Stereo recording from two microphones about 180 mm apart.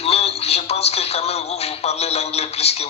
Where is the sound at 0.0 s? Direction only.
35° left (ahead or behind).